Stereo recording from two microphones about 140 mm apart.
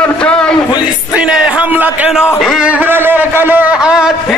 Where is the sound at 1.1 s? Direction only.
10° right (ahead or behind).